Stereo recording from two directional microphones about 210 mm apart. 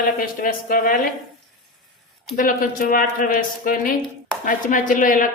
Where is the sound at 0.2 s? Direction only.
40° left (ahead or behind).